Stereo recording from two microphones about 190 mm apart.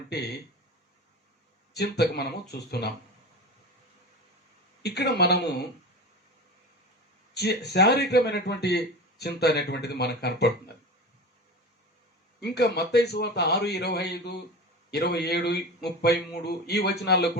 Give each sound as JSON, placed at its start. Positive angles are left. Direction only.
{"t": 0.1, "sound": "a sound", "side_deg": 60}
{"t": 1.7, "sound": "a man's voice", "side_deg": 60}
{"t": 4.8, "sound": "a man's voice", "side_deg": 60}
{"t": 7.3, "sound": "a man's voice", "side_deg": 60}
{"t": 12.4, "sound": "a man's voice", "side_deg": 60}